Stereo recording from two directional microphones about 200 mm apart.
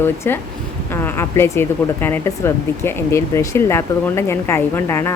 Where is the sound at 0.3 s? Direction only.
10° left (ahead or behind).